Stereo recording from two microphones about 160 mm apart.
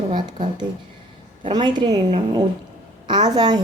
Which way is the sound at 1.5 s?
30° right (ahead or behind).